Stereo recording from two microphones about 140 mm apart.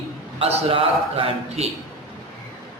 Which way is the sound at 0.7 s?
40° right (ahead or behind).